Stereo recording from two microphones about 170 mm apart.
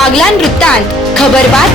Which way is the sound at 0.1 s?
5° left (ahead or behind).